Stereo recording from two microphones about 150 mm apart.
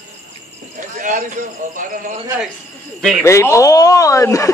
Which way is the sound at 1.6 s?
55° right (ahead or behind).